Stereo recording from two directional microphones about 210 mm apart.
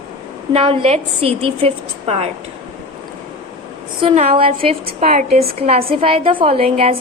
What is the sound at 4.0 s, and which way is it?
A woman's voice, 30° right (ahead or behind).